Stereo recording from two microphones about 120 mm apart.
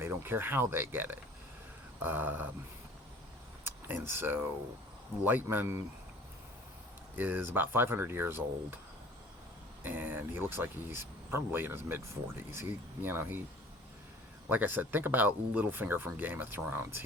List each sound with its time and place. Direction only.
0.0 s speech: 20° right (ahead or behind)
3.6 s speech: 20° right (ahead or behind)
7.2 s speech: 15° right (ahead or behind)
9.8 s speech: 15° right (ahead or behind)
14.5 s speech: 15° right (ahead or behind)